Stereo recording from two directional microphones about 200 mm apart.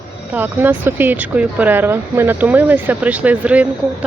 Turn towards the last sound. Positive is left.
turn(degrees=-5)  # may be behind; listen again after turning